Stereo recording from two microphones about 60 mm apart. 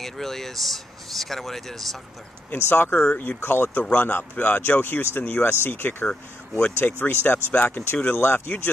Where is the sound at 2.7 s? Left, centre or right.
Left.